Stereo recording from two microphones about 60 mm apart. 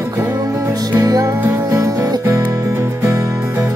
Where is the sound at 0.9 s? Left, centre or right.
Right.